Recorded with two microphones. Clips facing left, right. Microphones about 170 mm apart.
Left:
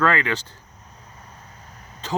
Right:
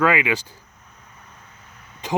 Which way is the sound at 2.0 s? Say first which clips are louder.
Right 3 dB; 15° right (ahead or behind).